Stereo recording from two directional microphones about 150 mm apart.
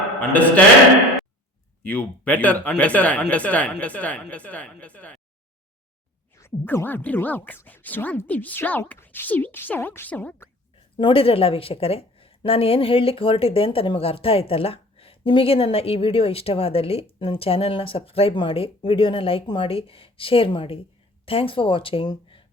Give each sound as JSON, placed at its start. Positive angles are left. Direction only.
{"t": 0.2, "sound": "speech", "side_deg": 10}
{"t": 1.9, "sound": "speech", "side_deg": 10}
{"t": 6.4, "sound": "speech", "side_deg": 15}
{"t": 10.9, "sound": "a woman's voice", "side_deg": 35}